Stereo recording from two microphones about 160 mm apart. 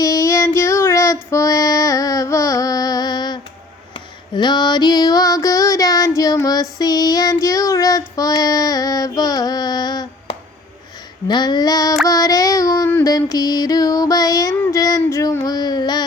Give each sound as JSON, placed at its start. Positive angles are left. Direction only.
{"t": 0.0, "sound": "child singing", "side_deg": 20}
{"t": 3.9, "sound": "female singing", "side_deg": 25}
{"t": 12.0, "sound": "child singing", "side_deg": 20}